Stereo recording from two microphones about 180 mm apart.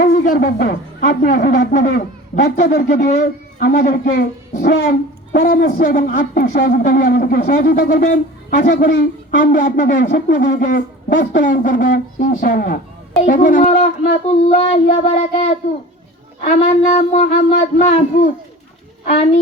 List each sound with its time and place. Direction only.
0.0 s speech: 55° left (ahead or behind)
14.3 s child singing: 40° left (ahead or behind)
16.4 s speech: 45° left (ahead or behind)